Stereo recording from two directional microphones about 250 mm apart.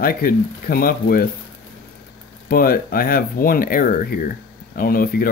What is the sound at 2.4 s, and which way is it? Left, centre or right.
Speech, left.